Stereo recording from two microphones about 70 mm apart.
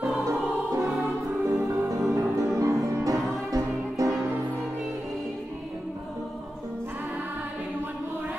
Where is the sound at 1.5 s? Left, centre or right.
Right.